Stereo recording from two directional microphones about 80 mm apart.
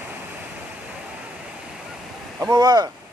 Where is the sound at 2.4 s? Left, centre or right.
Right.